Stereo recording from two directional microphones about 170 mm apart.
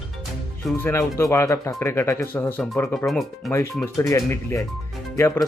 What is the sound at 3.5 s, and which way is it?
Speech, 15° left (ahead or behind).